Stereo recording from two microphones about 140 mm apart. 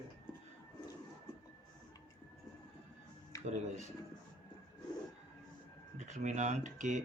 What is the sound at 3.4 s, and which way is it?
Music, 55° right (ahead or behind).